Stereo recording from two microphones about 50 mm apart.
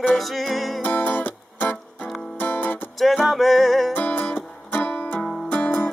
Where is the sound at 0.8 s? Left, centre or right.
Left.